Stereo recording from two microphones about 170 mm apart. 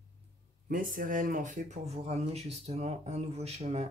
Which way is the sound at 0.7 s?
55° right (ahead or behind).